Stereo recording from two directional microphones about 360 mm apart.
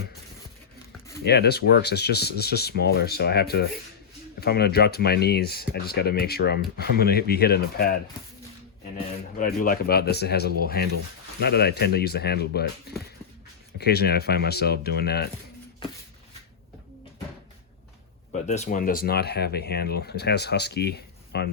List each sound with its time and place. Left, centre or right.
1.2 s speech: left
9.4 s speech: left
13.7 s speech: left
18.3 s speech: centre